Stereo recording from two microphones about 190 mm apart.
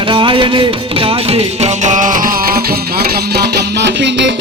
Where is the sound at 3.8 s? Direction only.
65° right (ahead or behind).